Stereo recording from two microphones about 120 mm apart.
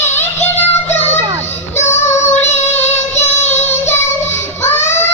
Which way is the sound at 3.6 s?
20° left (ahead or behind).